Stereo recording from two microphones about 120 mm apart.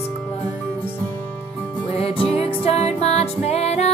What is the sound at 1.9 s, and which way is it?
Music, 55° left (ahead or behind).